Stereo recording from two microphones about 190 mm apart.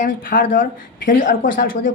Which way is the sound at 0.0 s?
45° left (ahead or behind).